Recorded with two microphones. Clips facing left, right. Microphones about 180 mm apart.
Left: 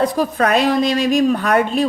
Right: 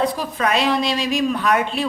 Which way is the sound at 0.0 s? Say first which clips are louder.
Left 4 dB; 50° left (ahead or behind).